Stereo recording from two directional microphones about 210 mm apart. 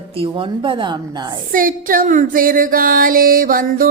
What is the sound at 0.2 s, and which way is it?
Speech, 25° right (ahead or behind).